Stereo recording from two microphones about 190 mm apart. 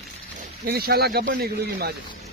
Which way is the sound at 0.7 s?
55° right (ahead or behind).